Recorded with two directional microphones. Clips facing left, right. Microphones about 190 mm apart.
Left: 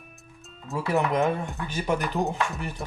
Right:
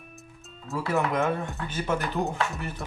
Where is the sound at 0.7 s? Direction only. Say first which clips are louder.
Left 2 dB; 15° left (ahead or behind).